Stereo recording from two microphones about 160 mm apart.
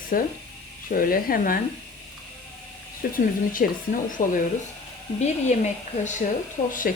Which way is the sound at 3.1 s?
60° left (ahead or behind).